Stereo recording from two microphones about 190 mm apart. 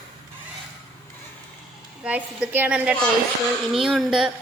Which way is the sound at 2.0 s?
5° right (ahead or behind).